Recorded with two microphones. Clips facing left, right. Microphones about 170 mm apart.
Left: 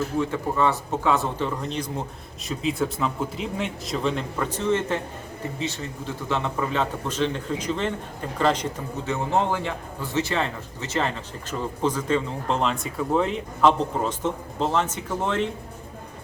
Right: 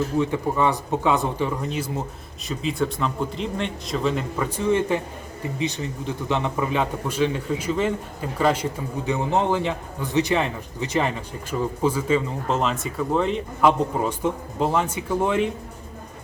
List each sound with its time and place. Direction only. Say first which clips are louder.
0.2 s a man's voice: right 1 dB; 15° right (ahead or behind); by 13.7 s centre (ahead or behind)
13.7 s a man's voice: right 1 dB; 10° right (ahead or behind)